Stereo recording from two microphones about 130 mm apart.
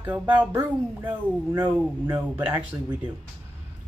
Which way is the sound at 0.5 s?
20° right (ahead or behind).